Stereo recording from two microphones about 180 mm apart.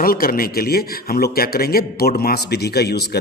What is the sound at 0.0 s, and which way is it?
Speech, 55° left (ahead or behind).